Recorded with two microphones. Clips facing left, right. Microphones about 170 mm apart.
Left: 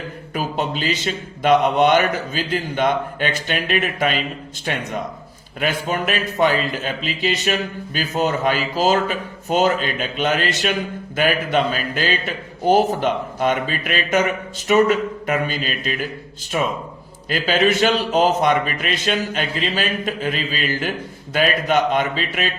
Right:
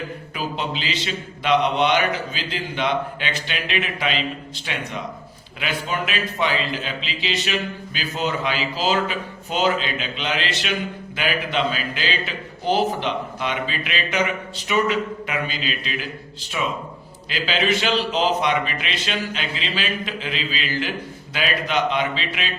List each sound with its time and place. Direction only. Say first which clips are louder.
0.3 s a man's voice: left 4 dB; 45° left (ahead or behind)